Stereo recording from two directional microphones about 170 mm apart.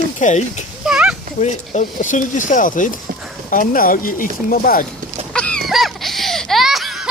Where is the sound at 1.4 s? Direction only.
45° left (ahead or behind).